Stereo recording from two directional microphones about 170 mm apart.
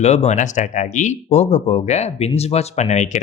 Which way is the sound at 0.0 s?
40° left (ahead or behind).